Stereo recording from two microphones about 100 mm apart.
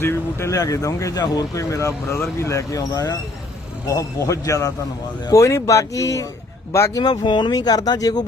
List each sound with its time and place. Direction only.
0.0 s speech: 25° left (ahead or behind)
7.0 s speech: 50° left (ahead or behind)